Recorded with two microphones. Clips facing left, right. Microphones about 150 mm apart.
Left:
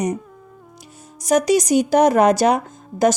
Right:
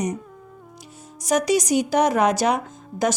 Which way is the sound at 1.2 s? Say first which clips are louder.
Left 4 dB; 40° left (ahead or behind).